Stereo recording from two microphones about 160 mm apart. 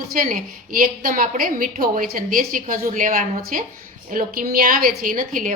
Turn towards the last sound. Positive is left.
turn(degrees=-55)  # may be behind; listen again after turning